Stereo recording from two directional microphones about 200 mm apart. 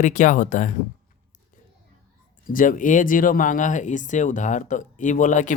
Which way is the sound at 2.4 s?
40° left (ahead or behind).